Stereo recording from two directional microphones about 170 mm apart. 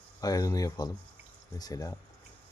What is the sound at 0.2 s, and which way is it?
Speech, 20° left (ahead or behind).